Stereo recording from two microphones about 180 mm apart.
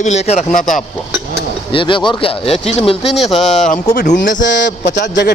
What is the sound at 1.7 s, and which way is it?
Speech, 30° left (ahead or behind).